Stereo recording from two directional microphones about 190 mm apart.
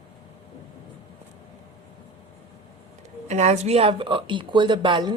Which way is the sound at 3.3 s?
35° right (ahead or behind).